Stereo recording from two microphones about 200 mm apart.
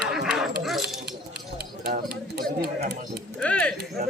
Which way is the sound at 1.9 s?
50° right (ahead or behind).